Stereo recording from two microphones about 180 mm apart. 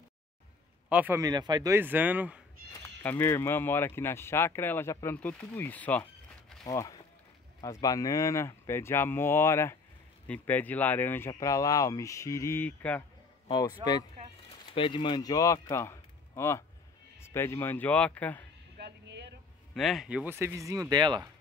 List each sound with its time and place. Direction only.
0.8 s a man's voice: 10° right (ahead or behind)
1.2 s speech: 20° right (ahead or behind)
2.7 s speech: 10° left (ahead or behind)
6.6 s speech: 20° left (ahead or behind)
13.8 s speech: 30° right (ahead or behind)
14.7 s speech: 30° left (ahead or behind); by 18.4 s 10° left (ahead or behind)
18.8 s music: 70° right (ahead or behind)
19.7 s speech: centre (ahead or behind); by 21.2 s 25° right (ahead or behind)